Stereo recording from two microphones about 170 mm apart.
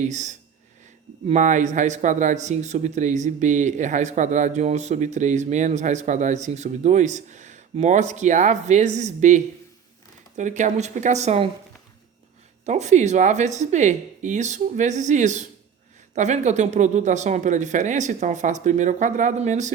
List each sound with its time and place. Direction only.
0.0 s speech: 45° right (ahead or behind)
12.6 s speech: 40° right (ahead or behind)